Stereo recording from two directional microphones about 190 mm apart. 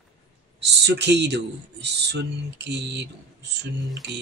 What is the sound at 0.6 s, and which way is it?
Speech, 60° right (ahead or behind).